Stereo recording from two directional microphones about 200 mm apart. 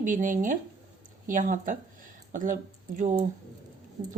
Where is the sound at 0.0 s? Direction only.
40° right (ahead or behind).